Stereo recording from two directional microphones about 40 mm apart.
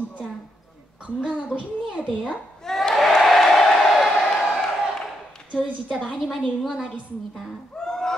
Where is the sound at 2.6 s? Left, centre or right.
Centre.